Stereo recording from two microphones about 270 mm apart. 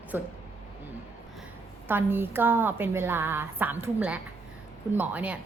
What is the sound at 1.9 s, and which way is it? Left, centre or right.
A woman's voice, centre.